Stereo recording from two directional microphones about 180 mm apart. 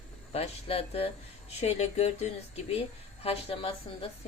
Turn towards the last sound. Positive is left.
turn(degrees=30)  # may be behind; listen again after turning